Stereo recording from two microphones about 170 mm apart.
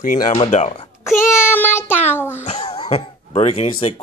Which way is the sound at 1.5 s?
15° left (ahead or behind).